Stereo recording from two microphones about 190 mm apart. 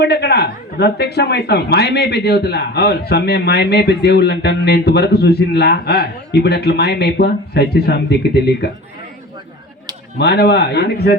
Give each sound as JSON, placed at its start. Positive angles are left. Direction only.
{"t": 0.0, "sound": "speech", "side_deg": 60}
{"t": 10.2, "sound": "speech", "side_deg": 60}